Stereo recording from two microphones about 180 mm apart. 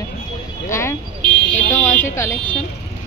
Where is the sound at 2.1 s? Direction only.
15° left (ahead or behind).